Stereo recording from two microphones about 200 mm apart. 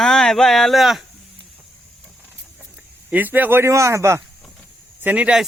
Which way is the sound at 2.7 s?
10° right (ahead or behind).